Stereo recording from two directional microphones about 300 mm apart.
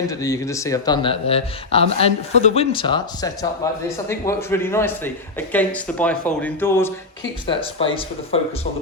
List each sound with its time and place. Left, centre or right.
0.1 s speech: centre